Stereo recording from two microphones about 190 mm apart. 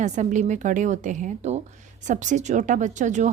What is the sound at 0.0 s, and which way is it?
Speech, 40° right (ahead or behind).